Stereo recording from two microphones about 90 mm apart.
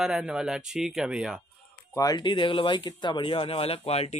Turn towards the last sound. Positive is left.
turn(degrees=90)